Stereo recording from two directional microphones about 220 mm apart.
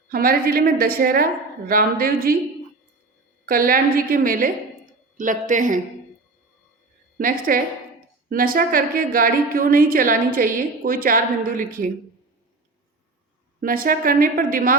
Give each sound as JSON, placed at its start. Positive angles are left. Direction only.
{"t": 0.1, "sound": "a woman's voice", "side_deg": -40}
{"t": 3.4, "sound": "a woman's voice", "side_deg": -40}
{"t": 7.2, "sound": "a woman's voice", "side_deg": -40}
{"t": 13.6, "sound": "a woman's voice", "side_deg": -40}